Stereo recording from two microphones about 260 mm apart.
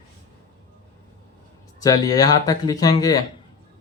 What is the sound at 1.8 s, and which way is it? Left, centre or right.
Speech, centre.